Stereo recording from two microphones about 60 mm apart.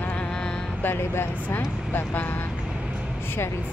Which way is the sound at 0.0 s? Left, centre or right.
Left.